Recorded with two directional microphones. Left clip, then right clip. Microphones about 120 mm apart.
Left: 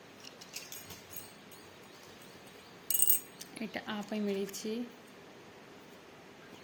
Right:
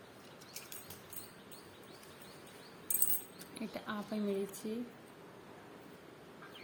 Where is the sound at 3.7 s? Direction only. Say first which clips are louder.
Left 3 dB; 15° right (ahead or behind).